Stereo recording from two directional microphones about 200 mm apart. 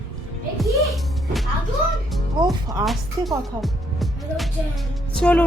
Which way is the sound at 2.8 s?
Centre (ahead or behind).